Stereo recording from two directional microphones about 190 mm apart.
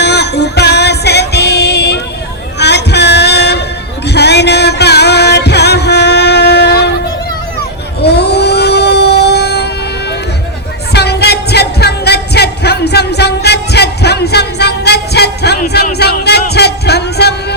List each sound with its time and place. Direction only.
0.0 s music: 60° left (ahead or behind)
8.0 s a sound: 60° left (ahead or behind)
10.9 s music: 60° left (ahead or behind)